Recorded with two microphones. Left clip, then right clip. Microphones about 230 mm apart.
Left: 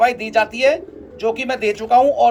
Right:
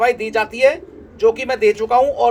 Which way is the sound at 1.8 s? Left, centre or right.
Right.